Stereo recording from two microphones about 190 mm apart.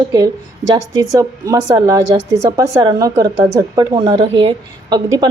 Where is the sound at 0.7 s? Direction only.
20° right (ahead or behind).